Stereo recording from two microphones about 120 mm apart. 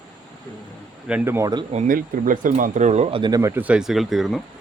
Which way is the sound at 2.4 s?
90° right.